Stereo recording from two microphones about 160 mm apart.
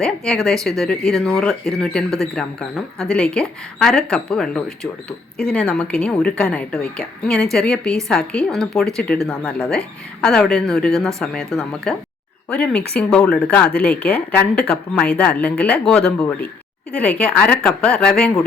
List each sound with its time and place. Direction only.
0.0 s speech: 5° left (ahead or behind)
2.0 s speech: 20° right (ahead or behind)
2.3 s speech: 5° left (ahead or behind)